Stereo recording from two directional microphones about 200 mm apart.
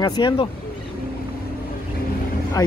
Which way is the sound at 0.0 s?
20° left (ahead or behind).